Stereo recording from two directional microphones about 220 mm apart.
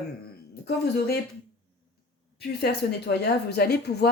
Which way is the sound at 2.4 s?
45° left (ahead or behind).